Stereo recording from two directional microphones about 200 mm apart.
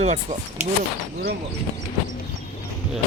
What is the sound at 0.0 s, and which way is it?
Speech, 35° right (ahead or behind).